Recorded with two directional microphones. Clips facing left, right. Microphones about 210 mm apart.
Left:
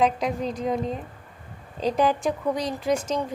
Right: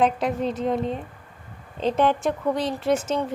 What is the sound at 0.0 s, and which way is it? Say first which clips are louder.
A woman's voice: right 1 dB; centre (ahead or behind).